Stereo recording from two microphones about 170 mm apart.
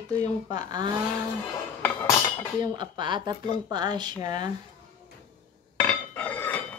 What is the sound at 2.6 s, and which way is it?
Speech, 25° right (ahead or behind).